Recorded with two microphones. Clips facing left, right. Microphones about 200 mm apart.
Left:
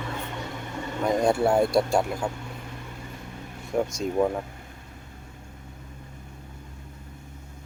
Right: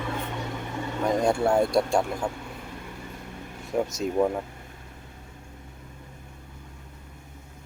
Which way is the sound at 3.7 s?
Centre (ahead or behind).